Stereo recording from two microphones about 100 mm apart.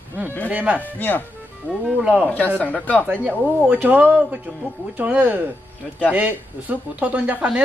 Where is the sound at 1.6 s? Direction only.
5° right (ahead or behind).